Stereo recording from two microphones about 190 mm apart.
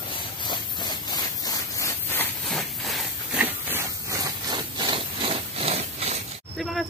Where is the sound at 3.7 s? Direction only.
15° right (ahead or behind); by 6.1 s 35° right (ahead or behind).